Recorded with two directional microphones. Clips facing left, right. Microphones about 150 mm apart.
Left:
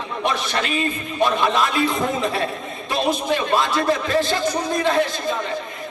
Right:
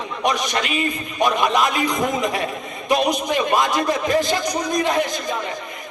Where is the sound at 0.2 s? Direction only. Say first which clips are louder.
Right 2 dB; 15° right (ahead or behind).